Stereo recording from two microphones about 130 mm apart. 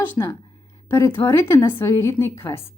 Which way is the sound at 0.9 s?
20° left (ahead or behind).